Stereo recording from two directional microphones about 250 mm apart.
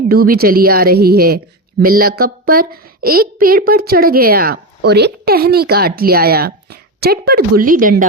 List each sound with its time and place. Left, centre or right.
0.1 s a woman's voice: right